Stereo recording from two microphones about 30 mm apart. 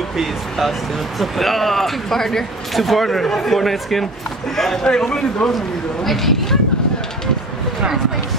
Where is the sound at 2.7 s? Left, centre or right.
Centre.